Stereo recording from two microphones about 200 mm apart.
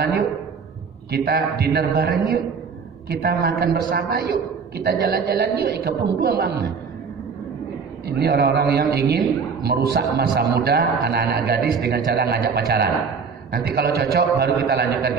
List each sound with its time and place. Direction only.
1.1 s a man's voice: 50° right (ahead or behind)
8.1 s a man's voice: 50° right (ahead or behind)